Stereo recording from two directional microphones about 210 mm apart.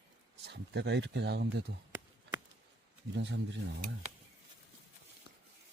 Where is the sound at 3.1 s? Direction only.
55° right (ahead or behind).